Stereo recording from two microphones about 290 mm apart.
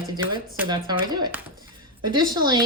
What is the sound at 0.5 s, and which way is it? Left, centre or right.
A woman's voice, centre.